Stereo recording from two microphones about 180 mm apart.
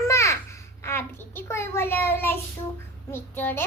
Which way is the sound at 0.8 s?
15° left (ahead or behind).